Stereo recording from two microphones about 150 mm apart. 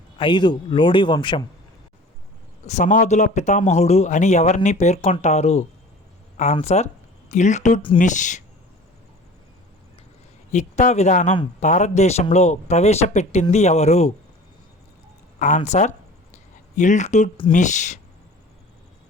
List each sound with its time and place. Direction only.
0.2 s a man's voice: 30° left (ahead or behind)
2.6 s a man's voice: 55° left (ahead or behind)
10.5 s a man's voice: 50° left (ahead or behind)
15.4 s a sound: 55° left (ahead or behind)
17.5 s a man's voice: 55° left (ahead or behind)